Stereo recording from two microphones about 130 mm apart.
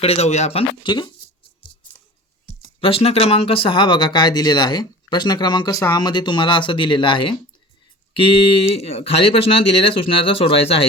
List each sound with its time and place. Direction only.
0.0 s speech: 50° left (ahead or behind)
0.9 s speech: 35° left (ahead or behind)
1.6 s a sound: 35° left (ahead or behind)
2.8 s speech: 50° left (ahead or behind)